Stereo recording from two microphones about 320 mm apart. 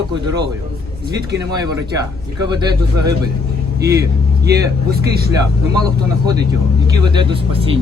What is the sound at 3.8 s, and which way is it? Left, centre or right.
Speech, right.